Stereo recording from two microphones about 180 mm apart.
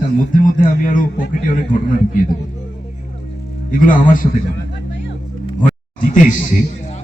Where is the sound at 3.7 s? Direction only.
50° left (ahead or behind).